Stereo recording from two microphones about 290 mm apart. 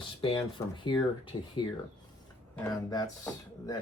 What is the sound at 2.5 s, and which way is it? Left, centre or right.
Speech, centre.